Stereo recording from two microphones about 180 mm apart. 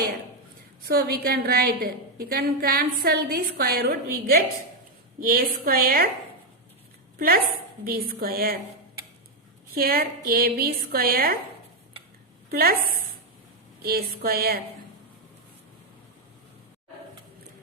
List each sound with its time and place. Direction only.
0.9 s a woman's voice: 60° right (ahead or behind)
7.2 s a woman's voice: 55° right (ahead or behind)
9.7 s a woman's voice: 55° right (ahead or behind)
12.5 s a woman's voice: 55° right (ahead or behind)
13.8 s a woman's voice: 55° right (ahead or behind)